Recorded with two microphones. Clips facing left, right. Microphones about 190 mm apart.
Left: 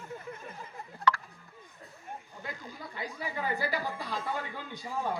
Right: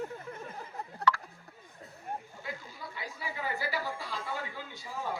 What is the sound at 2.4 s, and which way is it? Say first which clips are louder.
A woman's voice: even; 45° left (ahead or behind).